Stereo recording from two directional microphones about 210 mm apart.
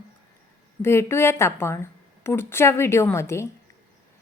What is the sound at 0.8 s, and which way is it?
A woman's voice, 10° left (ahead or behind).